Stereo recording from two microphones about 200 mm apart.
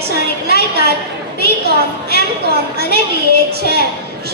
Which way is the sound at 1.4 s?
50° right (ahead or behind).